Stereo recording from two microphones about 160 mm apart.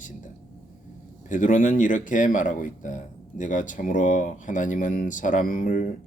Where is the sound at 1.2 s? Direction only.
50° left (ahead or behind).